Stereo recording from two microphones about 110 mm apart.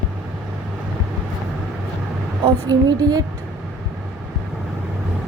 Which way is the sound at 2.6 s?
35° right (ahead or behind).